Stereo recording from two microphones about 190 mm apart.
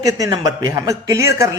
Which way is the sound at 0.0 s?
20° right (ahead or behind).